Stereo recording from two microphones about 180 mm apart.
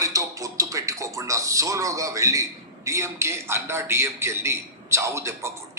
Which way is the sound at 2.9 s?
15° right (ahead or behind).